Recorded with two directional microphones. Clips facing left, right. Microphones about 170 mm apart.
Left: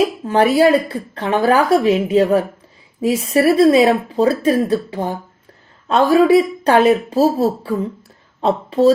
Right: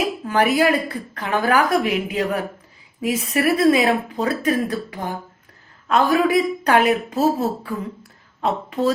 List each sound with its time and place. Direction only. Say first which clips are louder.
0.3 s a woman's voice: left 5 dB; 30° left (ahead or behind)